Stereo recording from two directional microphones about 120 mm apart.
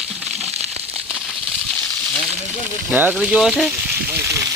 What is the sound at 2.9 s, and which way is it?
Speech, 10° right (ahead or behind).